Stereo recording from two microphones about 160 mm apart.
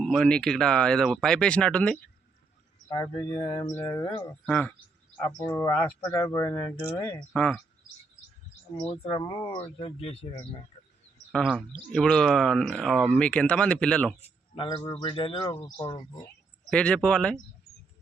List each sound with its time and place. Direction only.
0.0 s speech: 5° left (ahead or behind)
2.9 s speech: 25° left (ahead or behind)
3.6 s speech: 15° left (ahead or behind)
8.9 s speech: 35° left (ahead or behind)
9.3 s speech: 20° left (ahead or behind)
9.6 s speech: 35° left (ahead or behind)
11.3 s speech: 5° left (ahead or behind)
14.2 s a man's voice: 35° left (ahead or behind)
15.5 s speech: 20° left (ahead or behind)
16.6 s speech: 5° left (ahead or behind)